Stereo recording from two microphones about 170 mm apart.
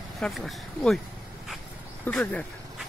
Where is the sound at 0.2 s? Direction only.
Centre (ahead or behind).